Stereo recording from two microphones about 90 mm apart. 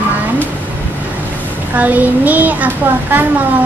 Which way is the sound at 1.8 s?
20° right (ahead or behind).